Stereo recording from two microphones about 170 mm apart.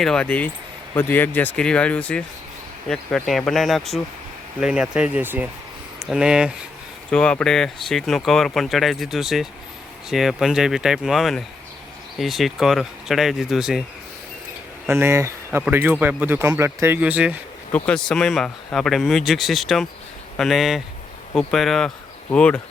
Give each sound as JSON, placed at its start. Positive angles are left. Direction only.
{"t": 0.0, "sound": "speech", "side_deg": 5}
{"t": 7.1, "sound": "speech", "side_deg": 5}
{"t": 14.8, "sound": "speech", "side_deg": -15}
{"t": 17.7, "sound": "speech", "side_deg": 10}